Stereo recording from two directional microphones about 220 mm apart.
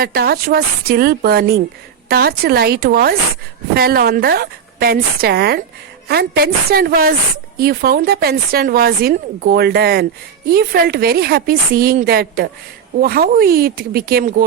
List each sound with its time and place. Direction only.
0.0 s speech: 45° right (ahead or behind)